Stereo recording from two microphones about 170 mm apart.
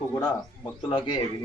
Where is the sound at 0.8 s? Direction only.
30° left (ahead or behind).